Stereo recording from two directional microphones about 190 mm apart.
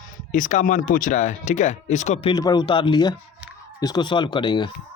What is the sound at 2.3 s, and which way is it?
Speech, 20° left (ahead or behind).